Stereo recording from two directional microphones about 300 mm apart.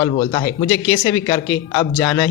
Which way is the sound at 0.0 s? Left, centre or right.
Centre.